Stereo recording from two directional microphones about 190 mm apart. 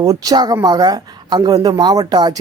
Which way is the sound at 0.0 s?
20° right (ahead or behind).